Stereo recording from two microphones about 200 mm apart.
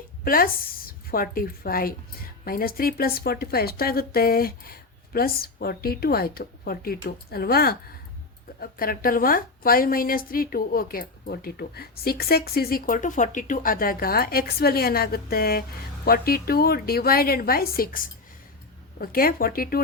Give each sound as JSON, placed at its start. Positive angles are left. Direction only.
{"t": 0.3, "sound": "a woman's voice", "side_deg": 45}